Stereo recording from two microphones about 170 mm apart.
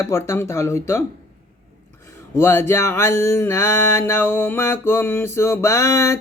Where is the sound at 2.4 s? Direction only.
15° left (ahead or behind).